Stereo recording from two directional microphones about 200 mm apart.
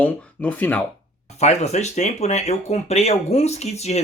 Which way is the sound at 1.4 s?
35° left (ahead or behind).